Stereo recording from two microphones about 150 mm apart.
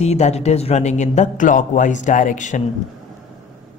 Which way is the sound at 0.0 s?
45° left (ahead or behind).